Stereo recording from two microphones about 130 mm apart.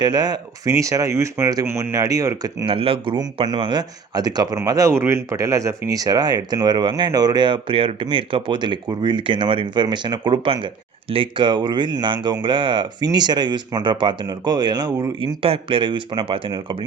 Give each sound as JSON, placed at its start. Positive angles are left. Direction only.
{"t": 0.0, "sound": "speech", "side_deg": -30}
{"t": 2.6, "sound": "speech", "side_deg": -45}
{"t": 15.4, "sound": "speech", "side_deg": -45}